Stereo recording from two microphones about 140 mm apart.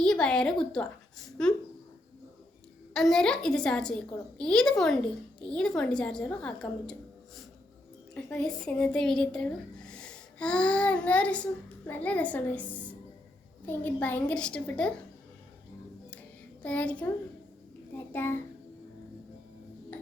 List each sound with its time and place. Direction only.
0.0 s a woman's voice: 5° left (ahead or behind)
2.9 s a woman's voice: 5° left (ahead or behind)
8.1 s a woman's voice: 5° left (ahead or behind)
16.6 s a woman's voice: 10° left (ahead or behind)